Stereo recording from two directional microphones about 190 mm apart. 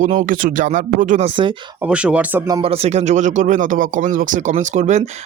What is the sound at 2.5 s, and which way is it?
Speech, 30° right (ahead or behind).